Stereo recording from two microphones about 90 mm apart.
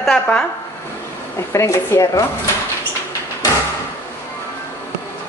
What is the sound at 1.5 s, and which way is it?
Speech, 35° left (ahead or behind).